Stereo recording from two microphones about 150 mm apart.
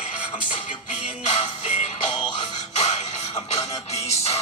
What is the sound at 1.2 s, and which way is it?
Music, 50° left (ahead or behind).